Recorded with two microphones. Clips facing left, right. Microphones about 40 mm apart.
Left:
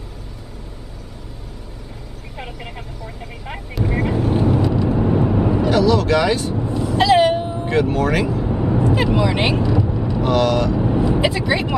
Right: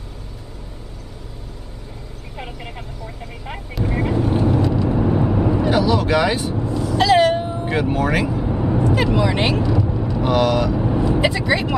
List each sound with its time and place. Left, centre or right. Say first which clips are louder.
2.3 s speech: even; centre
3.2 s vehicle: left 1 dB; centre
5.7 s speech: left 3 dB; centre
6.6 s vehicle: even; left
7.0 s cat: left 1 dB; centre
7.3 s vehicle: left 2 dB; centre
10.2 s speech: even; centre
10.8 s speech: left 1 dB; centre